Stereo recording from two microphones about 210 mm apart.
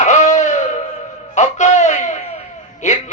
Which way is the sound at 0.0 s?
35° left (ahead or behind).